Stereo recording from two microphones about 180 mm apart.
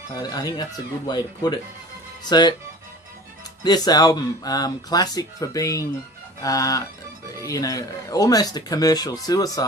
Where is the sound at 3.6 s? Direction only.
20° left (ahead or behind).